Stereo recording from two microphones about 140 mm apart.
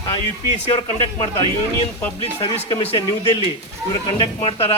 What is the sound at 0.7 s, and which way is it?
Speech, 40° left (ahead or behind).